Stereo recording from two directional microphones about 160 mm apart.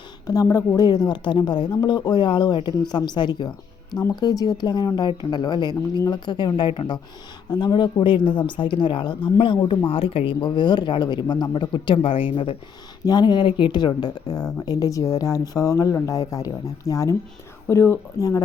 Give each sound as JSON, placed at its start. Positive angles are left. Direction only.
{"t": 0.3, "sound": "speech", "side_deg": 20}